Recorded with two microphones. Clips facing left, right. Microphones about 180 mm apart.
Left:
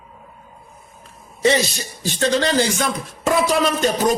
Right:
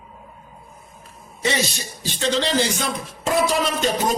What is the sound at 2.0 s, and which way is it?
Speech, 50° left (ahead or behind).